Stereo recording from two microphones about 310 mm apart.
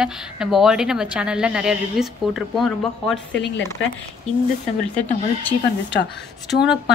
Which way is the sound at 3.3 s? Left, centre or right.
Left.